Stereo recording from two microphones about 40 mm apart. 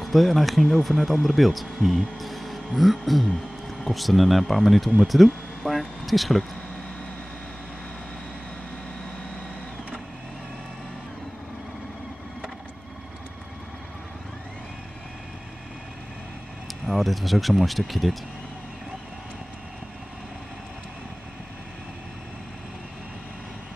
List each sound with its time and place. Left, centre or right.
0.0 s speech: centre
16.8 s speech: centre